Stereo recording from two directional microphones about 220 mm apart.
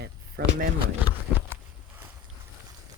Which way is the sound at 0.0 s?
45° right (ahead or behind).